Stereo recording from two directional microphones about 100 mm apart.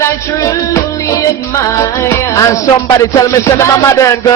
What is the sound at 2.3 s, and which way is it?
Speech, 30° left (ahead or behind).